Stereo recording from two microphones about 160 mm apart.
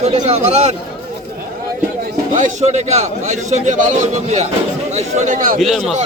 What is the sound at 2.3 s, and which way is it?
A man's voice, 45° right (ahead or behind).